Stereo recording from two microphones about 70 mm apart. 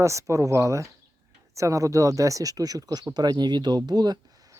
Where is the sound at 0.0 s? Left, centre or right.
Right.